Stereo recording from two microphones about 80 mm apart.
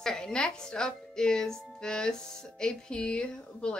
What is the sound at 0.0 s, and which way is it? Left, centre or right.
A woman's voice, centre.